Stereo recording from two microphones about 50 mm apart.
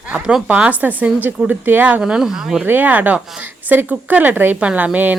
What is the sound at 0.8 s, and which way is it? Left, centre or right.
Speech, right.